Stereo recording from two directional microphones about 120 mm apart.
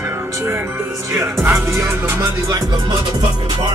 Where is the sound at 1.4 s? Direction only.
20° right (ahead or behind).